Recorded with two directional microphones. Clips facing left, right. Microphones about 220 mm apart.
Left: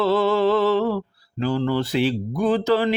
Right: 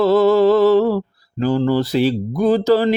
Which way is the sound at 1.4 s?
45° right (ahead or behind).